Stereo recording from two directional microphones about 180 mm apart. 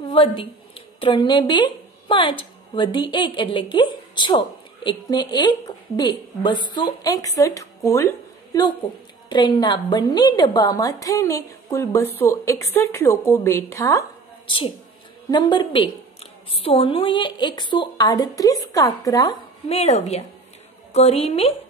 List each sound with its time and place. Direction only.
0.0 s a woman's voice: 30° left (ahead or behind)
9.3 s a woman's voice: 25° left (ahead or behind)
15.3 s a woman's voice: 25° left (ahead or behind)
19.7 s a woman's voice: 35° left (ahead or behind)